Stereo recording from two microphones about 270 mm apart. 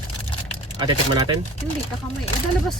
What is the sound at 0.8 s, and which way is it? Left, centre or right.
Speech, centre.